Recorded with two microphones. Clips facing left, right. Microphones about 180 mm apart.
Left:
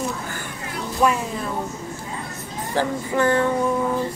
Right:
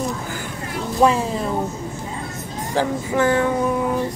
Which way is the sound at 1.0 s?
30° right (ahead or behind).